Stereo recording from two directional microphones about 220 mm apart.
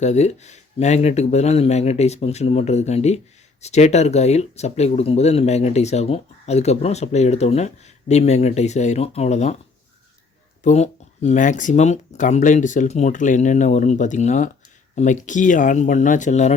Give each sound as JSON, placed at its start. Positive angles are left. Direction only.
{"t": 0.0, "sound": "speech", "side_deg": 30}
{"t": 10.6, "sound": "speech", "side_deg": 30}